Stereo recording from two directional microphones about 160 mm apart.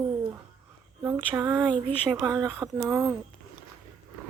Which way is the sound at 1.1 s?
10° right (ahead or behind).